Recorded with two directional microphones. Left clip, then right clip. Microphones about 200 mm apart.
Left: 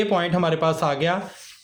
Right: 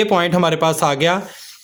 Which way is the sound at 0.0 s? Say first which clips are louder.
Right 6 dB; 40° right (ahead or behind).